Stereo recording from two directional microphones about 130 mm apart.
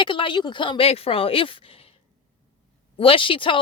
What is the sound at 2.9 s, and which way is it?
Speech, 45° left (ahead or behind).